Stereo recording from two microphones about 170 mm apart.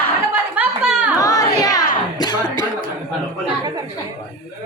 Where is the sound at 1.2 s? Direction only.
20° left (ahead or behind).